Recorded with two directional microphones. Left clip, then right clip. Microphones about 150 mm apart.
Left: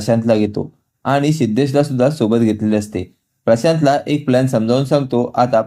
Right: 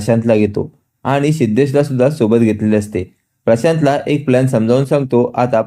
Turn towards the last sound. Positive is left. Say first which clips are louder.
# right 1 dB
turn(degrees=-20)  # may be behind; listen again after turning